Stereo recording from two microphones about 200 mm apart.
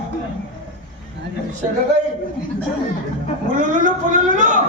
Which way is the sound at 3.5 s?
40° right (ahead or behind).